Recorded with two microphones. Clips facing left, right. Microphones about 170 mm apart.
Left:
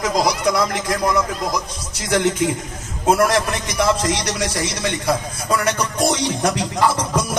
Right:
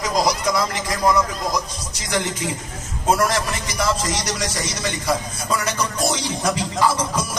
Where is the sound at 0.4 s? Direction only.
60° left (ahead or behind).